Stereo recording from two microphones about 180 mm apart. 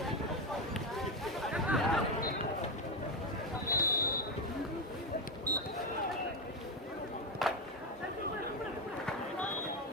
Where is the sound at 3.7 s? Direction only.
50° left (ahead or behind).